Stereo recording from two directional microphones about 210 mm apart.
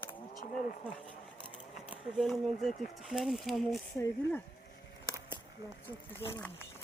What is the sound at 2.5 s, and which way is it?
Speech, 45° left (ahead or behind).